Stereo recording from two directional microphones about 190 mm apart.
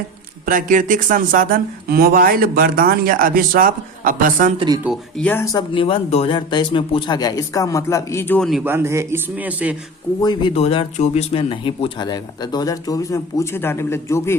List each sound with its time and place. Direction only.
0.4 s speech: 45° right (ahead or behind)
4.8 s speech: 5° right (ahead or behind)
5.2 s speech: 10° left (ahead or behind)
8.4 s a man's voice: 5° right (ahead or behind)
10.2 s speech: 25° left (ahead or behind)